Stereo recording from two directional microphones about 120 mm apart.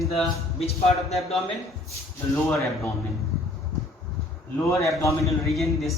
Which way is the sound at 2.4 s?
25° left (ahead or behind).